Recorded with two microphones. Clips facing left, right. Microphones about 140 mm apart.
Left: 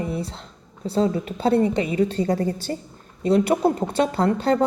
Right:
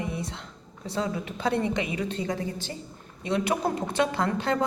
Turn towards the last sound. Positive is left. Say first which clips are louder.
# left 6 dB
turn(degrees=35)  # may be behind; listen again after turning